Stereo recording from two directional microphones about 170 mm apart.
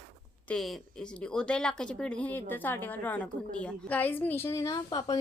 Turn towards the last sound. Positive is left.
turn(degrees=25)  # may be behind; listen again after turning